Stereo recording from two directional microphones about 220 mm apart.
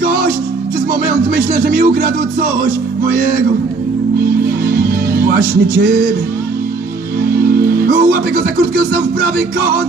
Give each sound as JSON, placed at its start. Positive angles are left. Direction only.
{"t": 1.0, "sound": "speech", "side_deg": -40}
{"t": 4.6, "sound": "music", "side_deg": -40}
{"t": 7.4, "sound": "music", "side_deg": -45}